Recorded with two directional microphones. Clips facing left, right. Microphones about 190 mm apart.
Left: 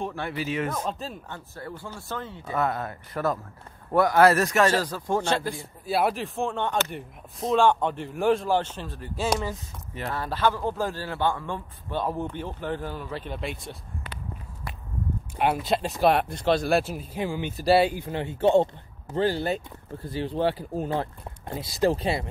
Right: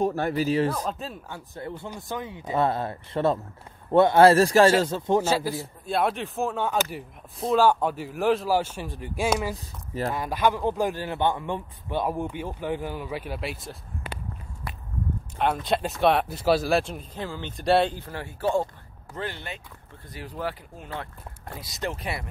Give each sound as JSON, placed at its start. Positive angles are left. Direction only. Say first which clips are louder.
{"t": 0.0, "sound": "a man's voice", "louder": "right 6 dB", "side_deg": -40}
{"t": 0.8, "sound": "speech", "louder": "even", "side_deg": 0}
{"t": 1.5, "sound": "speech", "louder": "right 4 dB", "side_deg": -20}
{"t": 2.5, "sound": "speech", "louder": "right 3 dB", "side_deg": -30}
{"t": 5.2, "sound": "speech", "louder": "right 2 dB", "side_deg": -5}
{"t": 15.3, "sound": "speech", "louder": "left 1 dB", "side_deg": 10}